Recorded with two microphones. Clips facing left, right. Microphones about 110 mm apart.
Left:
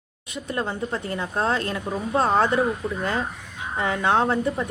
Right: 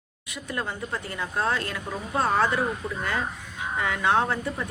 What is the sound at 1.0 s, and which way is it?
Speech, 30° left (ahead or behind).